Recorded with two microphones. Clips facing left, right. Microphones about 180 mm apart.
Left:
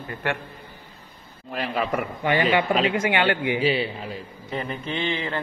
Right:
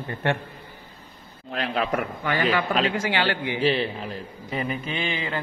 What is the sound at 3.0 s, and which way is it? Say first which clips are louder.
Speech: left 3 dB; 55° left (ahead or behind).